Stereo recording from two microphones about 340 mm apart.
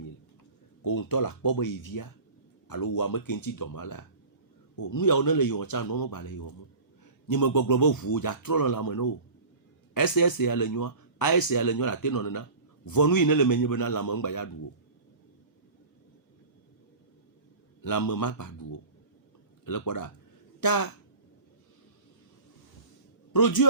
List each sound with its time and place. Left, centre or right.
0.9 s speech: left
7.3 s speech: left
17.8 s speech: left
19.6 s speech: left
20.6 s speech: left
23.3 s a man's voice: left